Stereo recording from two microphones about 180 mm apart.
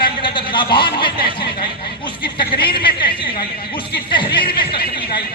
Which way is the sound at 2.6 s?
25° left (ahead or behind).